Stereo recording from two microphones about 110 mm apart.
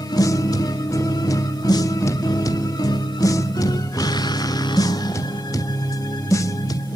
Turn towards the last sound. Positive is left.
turn(degrees=30)  # may be behind; listen again after turning